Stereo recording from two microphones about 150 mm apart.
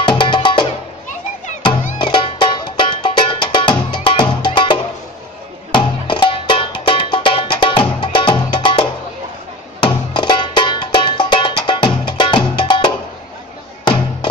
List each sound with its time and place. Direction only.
0.0 s music: 30° left (ahead or behind)
2.0 s music: 35° left (ahead or behind)